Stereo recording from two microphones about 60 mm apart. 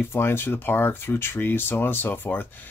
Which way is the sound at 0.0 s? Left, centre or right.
Left.